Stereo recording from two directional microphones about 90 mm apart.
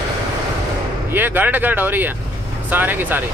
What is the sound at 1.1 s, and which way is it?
Speech, 20° right (ahead or behind).